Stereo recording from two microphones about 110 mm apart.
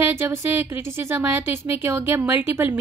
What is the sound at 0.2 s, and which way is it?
A woman's voice, 20° right (ahead or behind).